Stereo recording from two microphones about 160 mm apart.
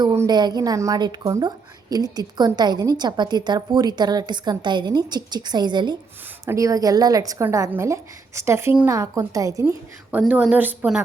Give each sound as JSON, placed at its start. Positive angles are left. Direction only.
{"t": 0.0, "sound": "a woman's voice", "side_deg": -20}
{"t": 10.1, "sound": "a woman's voice", "side_deg": -10}